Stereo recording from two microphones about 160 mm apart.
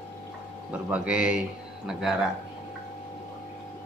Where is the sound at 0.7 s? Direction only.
10° right (ahead or behind).